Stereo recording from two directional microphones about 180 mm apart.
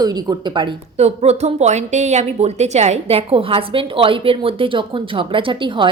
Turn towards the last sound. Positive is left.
turn(degrees=-25)  # may be behind; listen again after turning